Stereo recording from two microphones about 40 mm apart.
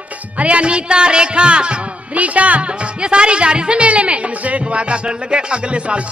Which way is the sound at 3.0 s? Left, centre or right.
Right.